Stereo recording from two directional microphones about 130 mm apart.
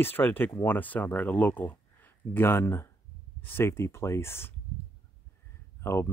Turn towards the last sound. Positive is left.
turn(degrees=20)  # may be behind; listen again after turning